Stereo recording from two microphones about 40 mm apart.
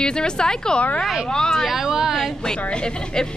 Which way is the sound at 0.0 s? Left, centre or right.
Left.